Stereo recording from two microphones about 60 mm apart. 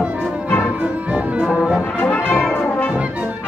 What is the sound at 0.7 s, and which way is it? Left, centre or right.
Music, right.